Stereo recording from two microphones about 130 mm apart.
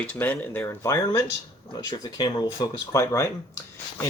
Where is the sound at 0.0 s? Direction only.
15° left (ahead or behind).